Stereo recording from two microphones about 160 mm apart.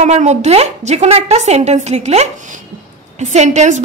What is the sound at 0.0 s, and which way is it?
A woman's voice, 45° right (ahead or behind).